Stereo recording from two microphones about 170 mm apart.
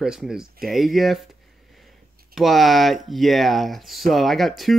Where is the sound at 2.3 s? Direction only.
Centre (ahead or behind).